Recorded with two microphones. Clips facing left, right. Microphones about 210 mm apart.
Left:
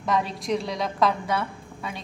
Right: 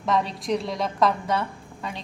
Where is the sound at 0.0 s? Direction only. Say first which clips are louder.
Right 1 dB; centre (ahead or behind).